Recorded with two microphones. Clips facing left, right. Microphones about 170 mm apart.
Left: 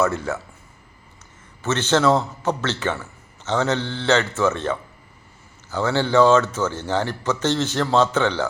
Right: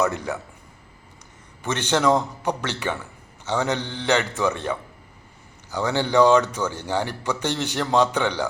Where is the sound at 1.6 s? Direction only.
15° right (ahead or behind).